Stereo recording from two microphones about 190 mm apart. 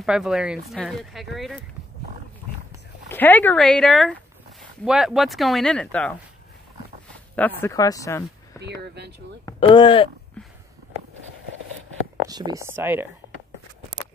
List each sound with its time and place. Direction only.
0.0 s speech: centre (ahead or behind)
3.1 s speech: 10° left (ahead or behind)
7.6 s speech: 20° left (ahead or behind)
8.8 s speech: 60° right (ahead or behind)
9.6 s speech: 25° left (ahead or behind)
12.3 s speech: 20° right (ahead or behind)